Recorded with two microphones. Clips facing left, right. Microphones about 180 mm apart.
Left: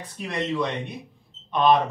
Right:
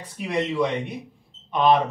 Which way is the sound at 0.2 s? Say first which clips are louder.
Right 3 dB; 10° right (ahead or behind).